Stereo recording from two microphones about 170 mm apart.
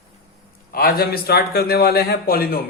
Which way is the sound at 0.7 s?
60° left (ahead or behind).